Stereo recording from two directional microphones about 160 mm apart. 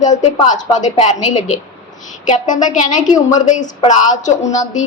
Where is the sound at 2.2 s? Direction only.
50° left (ahead or behind).